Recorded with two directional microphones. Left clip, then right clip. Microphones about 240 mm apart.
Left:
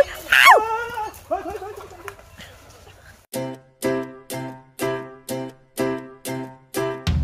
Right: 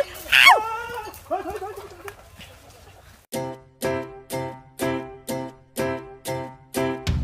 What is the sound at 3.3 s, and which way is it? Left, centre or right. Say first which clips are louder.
Music: left 1 dB; centre.